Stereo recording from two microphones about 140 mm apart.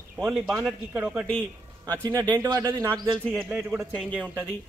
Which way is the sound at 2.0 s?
30° right (ahead or behind).